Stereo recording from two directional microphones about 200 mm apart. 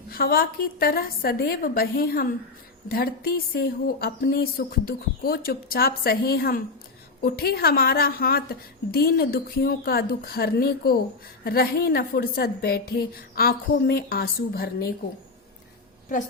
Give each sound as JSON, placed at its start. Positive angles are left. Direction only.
{"t": 0.1, "sound": "a woman's voice", "side_deg": 50}